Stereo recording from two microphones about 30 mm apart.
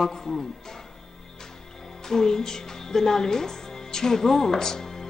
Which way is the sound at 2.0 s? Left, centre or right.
Centre.